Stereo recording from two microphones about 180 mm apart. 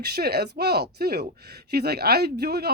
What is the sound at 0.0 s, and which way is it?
Speech, 60° right (ahead or behind).